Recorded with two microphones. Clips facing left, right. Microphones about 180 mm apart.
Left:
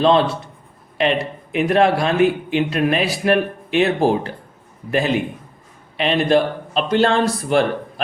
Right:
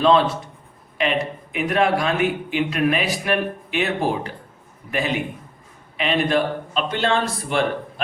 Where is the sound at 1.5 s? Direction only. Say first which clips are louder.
Left 4 dB; 35° left (ahead or behind).